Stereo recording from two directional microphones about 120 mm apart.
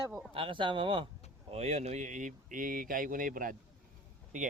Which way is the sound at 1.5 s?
65° right (ahead or behind).